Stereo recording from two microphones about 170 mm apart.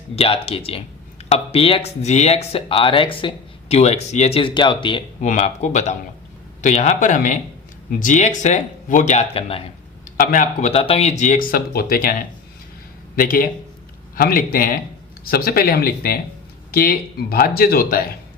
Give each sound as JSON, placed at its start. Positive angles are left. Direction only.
{"t": 0.2, "sound": "speech", "side_deg": 35}
{"t": 5.2, "sound": "speech", "side_deg": 45}
{"t": 10.2, "sound": "speech", "side_deg": 55}
{"t": 10.7, "sound": "speech", "side_deg": 35}
{"t": 13.1, "sound": "speech", "side_deg": 55}